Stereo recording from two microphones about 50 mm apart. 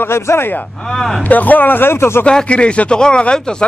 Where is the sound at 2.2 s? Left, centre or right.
Left.